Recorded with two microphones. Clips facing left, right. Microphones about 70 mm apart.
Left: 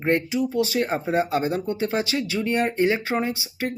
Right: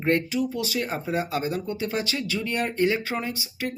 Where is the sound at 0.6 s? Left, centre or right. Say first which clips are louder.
Left 5 dB; left.